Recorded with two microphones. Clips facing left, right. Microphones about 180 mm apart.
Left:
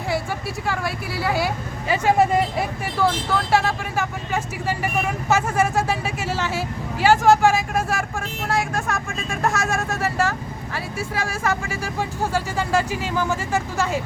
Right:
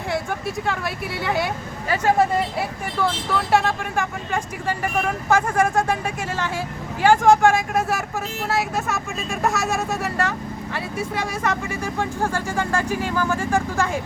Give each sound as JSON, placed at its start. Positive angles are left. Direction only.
{"t": 0.1, "sound": "speech", "side_deg": 5}
{"t": 3.0, "sound": "speech", "side_deg": 0}